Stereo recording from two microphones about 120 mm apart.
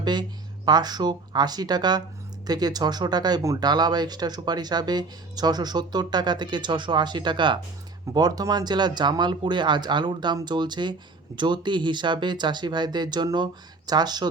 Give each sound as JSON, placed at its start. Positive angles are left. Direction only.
{"t": 0.0, "sound": "speech", "side_deg": -35}